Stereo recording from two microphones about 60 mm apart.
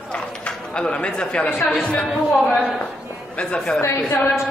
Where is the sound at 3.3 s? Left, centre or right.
Centre.